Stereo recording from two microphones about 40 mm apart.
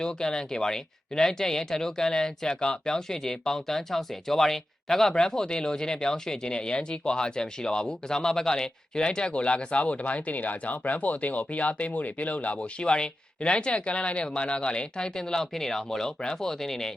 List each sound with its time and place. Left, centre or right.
0.0 s speech: centre; by 12.5 s left
12.5 s speech: left